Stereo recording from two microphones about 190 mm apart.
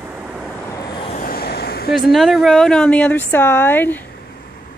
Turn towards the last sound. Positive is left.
turn(degrees=10)  # may be behind; listen again after turning